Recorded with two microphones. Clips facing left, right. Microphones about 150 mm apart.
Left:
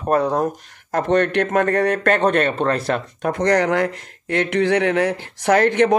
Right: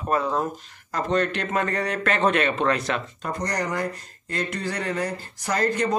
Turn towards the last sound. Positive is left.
turn(degrees=75)  # may be behind; listen again after turning